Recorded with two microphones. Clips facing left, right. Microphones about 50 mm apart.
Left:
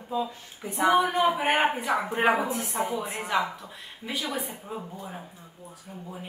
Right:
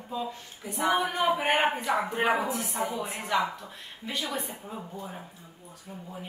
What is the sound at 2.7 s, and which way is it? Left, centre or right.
Speech, centre.